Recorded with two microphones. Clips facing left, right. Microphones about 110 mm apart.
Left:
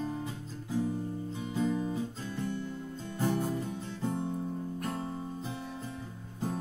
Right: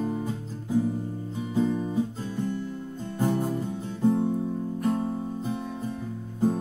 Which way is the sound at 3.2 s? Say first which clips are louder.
Right 5 dB; 20° right (ahead or behind).